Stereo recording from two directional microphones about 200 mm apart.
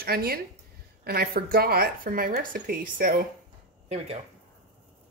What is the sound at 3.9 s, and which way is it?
Speech, 30° right (ahead or behind).